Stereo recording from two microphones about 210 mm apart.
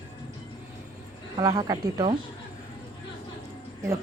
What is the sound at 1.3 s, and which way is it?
Speech, 20° right (ahead or behind).